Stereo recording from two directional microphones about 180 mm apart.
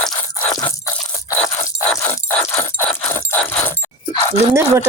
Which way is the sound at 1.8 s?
15° left (ahead or behind).